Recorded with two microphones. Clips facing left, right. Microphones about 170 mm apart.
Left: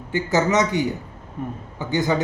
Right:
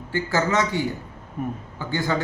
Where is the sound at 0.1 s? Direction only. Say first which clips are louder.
Left 3 dB; 20° left (ahead or behind).